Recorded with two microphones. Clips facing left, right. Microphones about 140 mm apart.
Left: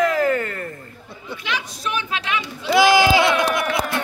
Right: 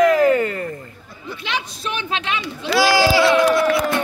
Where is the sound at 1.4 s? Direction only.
25° right (ahead or behind).